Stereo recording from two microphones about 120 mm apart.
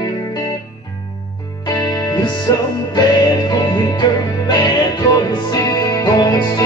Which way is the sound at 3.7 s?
35° left (ahead or behind).